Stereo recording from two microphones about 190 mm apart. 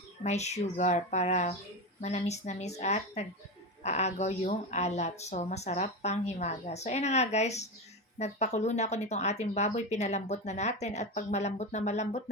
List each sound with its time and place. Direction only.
0.2 s speech: 35° left (ahead or behind)